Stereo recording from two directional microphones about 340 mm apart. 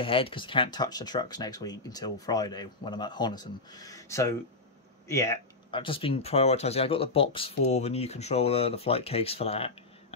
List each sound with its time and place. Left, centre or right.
0.0 s speech: centre